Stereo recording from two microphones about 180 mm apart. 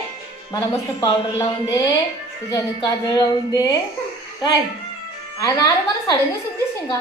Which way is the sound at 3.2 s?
20° left (ahead or behind).